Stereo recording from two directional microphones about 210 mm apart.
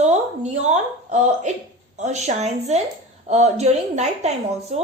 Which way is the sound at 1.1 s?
35° right (ahead or behind).